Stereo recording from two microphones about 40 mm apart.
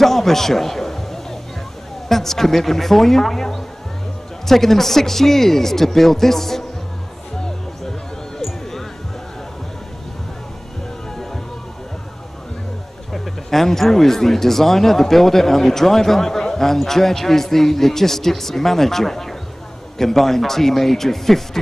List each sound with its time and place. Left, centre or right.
0.0 s a sound: centre
2.0 s speech: centre
13.1 s speech: centre